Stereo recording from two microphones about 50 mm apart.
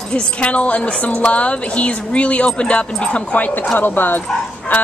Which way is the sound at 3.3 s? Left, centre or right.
Left.